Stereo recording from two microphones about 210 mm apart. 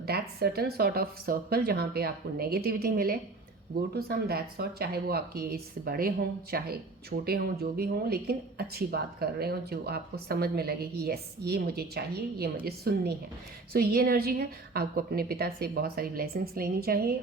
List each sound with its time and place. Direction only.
0.0 s speech: 50° right (ahead or behind)